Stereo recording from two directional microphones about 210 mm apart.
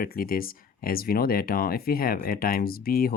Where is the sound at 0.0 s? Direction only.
45° left (ahead or behind).